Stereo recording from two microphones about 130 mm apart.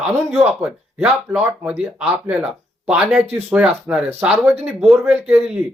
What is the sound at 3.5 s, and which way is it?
Speech, 10° right (ahead or behind).